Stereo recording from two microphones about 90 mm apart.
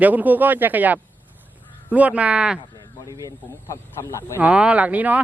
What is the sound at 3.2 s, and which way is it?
Speech, 35° left (ahead or behind).